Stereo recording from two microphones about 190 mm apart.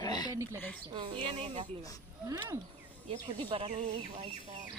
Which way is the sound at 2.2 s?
15° right (ahead or behind).